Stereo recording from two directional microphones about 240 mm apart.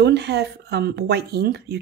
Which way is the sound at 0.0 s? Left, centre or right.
Right.